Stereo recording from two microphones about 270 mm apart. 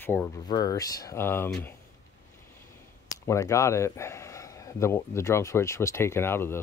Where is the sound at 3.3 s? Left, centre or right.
Centre.